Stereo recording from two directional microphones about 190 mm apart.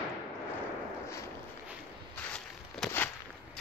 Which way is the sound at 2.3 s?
5° left (ahead or behind).